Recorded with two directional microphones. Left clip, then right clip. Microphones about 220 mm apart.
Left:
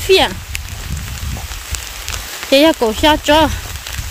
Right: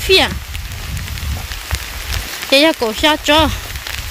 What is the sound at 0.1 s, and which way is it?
Speech, 25° left (ahead or behind).